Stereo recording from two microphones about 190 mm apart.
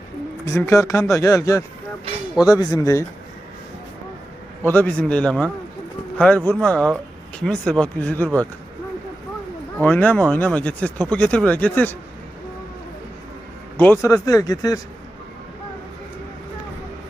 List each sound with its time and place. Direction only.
0.4 s speech: 15° left (ahead or behind)
4.6 s speech: 10° left (ahead or behind)
9.7 s speech: 10° left (ahead or behind)
13.7 s speech: 10° left (ahead or behind)